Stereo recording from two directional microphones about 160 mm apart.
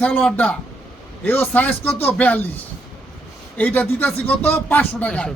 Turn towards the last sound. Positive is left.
turn(degrees=5)  # may be behind; listen again after turning